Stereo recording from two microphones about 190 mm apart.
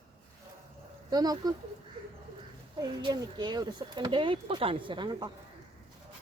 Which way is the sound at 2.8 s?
20° right (ahead or behind).